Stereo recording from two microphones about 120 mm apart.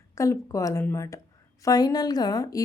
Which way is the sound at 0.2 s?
25° left (ahead or behind).